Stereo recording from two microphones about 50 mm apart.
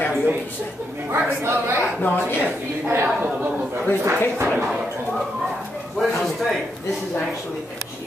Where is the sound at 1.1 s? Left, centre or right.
Right.